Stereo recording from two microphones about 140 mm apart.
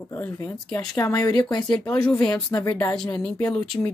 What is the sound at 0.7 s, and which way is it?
Speech, 20° left (ahead or behind).